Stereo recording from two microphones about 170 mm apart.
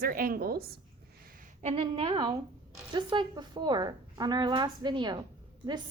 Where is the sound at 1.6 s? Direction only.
40° right (ahead or behind).